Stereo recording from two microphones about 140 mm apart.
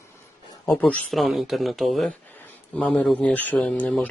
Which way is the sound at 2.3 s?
10° left (ahead or behind).